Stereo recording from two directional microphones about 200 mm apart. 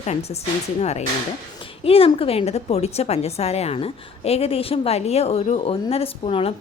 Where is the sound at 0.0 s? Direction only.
30° left (ahead or behind).